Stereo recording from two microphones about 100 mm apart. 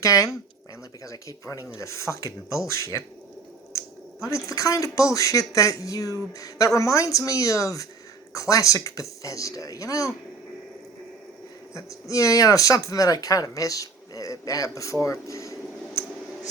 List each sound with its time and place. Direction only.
0.0 s speech: 35° left (ahead or behind)
4.3 s speech: 30° left (ahead or behind)
11.7 s speech: 35° left (ahead or behind)
15.0 s a sound: 30° left (ahead or behind)